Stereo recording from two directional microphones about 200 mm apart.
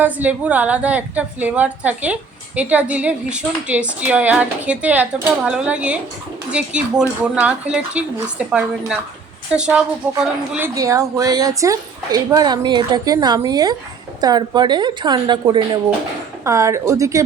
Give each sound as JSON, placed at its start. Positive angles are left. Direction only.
{"t": 0.0, "sound": "a woman's voice", "side_deg": -10}